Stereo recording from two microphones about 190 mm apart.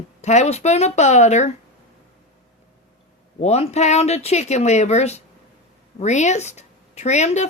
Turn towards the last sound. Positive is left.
turn(degrees=35)  # may be behind; listen again after turning